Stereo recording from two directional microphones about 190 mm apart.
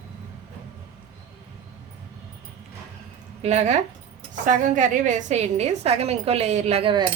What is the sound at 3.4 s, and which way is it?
A woman's voice, 35° right (ahead or behind).